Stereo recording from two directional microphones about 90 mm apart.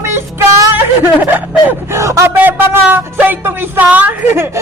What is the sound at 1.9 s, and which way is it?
Speech, 35° right (ahead or behind).